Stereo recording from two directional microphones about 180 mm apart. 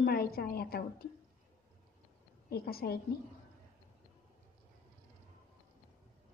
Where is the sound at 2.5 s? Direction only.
60° left (ahead or behind).